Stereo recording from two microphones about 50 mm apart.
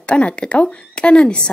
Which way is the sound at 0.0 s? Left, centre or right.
Left.